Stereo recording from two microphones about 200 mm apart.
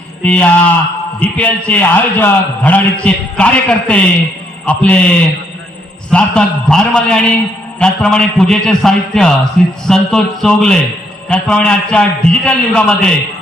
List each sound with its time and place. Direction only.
0.2 s a man's voice: 5° left (ahead or behind)